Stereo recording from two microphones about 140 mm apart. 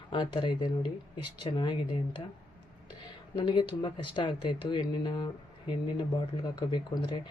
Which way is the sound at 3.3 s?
30° left (ahead or behind).